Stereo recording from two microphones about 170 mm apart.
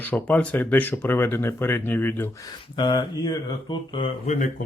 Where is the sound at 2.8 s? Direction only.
30° left (ahead or behind).